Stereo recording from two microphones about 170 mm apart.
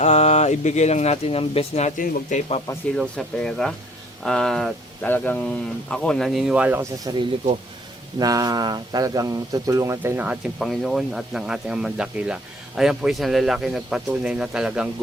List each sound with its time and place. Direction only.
0.0 s speech: 40° left (ahead or behind)
3.0 s speech: centre (ahead or behind)
7.0 s speech: 25° right (ahead or behind); by 14.8 s 5° right (ahead or behind)